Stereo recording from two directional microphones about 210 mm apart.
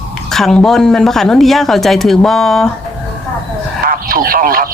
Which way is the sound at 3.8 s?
45° right (ahead or behind).